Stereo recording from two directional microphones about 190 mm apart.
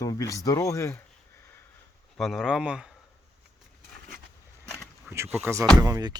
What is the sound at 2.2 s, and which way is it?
Speech, centre (ahead or behind).